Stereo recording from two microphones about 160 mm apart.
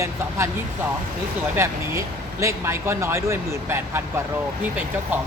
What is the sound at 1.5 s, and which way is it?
Speech, 15° right (ahead or behind).